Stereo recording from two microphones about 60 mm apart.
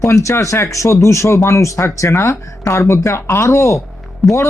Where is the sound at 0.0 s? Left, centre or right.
Left.